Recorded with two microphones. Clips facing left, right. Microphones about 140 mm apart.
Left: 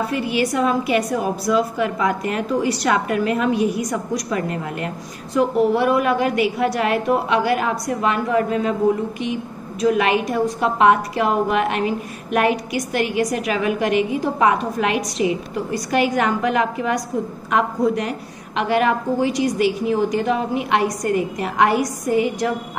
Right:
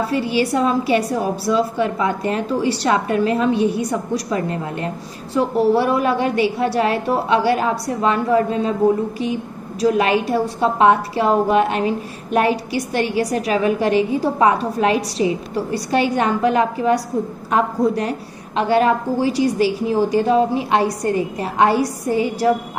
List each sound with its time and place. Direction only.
0.0 s a woman's voice: 30° right (ahead or behind)